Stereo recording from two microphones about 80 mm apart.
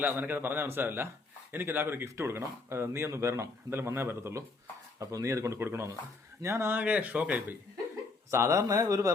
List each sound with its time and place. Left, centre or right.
0.0 s a man's voice: right
4.9 s speech: right
6.7 s a man's voice: centre
8.3 s speech: right